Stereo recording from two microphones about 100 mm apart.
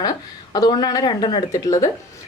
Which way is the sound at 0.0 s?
40° left (ahead or behind).